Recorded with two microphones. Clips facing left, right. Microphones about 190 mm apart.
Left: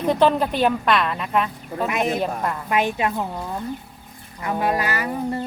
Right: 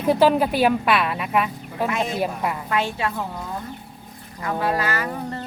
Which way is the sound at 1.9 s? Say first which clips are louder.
Left 4 dB; 20° left (ahead or behind).